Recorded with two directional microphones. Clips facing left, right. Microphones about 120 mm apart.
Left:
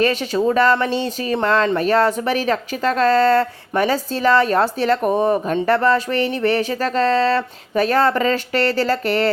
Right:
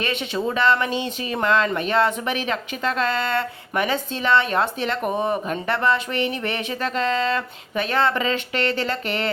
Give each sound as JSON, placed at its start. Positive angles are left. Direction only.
{"t": 0.0, "sound": "speech", "side_deg": 35}